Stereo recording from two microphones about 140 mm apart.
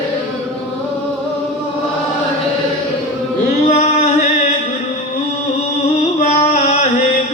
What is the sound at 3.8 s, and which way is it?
Chant, 60° left (ahead or behind).